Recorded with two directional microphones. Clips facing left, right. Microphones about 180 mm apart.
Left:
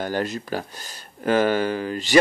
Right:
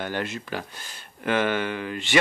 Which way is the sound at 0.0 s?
40° left (ahead or behind).